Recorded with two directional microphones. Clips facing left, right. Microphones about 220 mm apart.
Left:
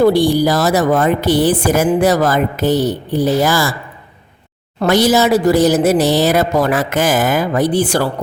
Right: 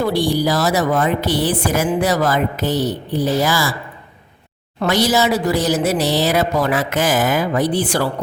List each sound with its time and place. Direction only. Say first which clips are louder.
0.0 s a woman's voice: left 6 dB; 50° left (ahead or behind)
4.8 s a woman's voice: left 4 dB; 50° left (ahead or behind)